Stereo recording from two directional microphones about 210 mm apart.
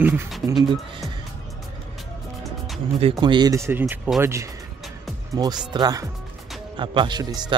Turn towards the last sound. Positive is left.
turn(degrees=-20)  # may be behind; listen again after turning